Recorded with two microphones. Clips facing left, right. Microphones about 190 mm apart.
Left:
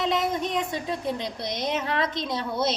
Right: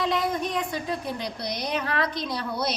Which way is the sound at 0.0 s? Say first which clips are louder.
Even; 20° left (ahead or behind).